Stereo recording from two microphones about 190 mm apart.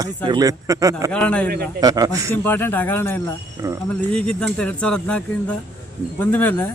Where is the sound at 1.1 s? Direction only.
5° left (ahead or behind).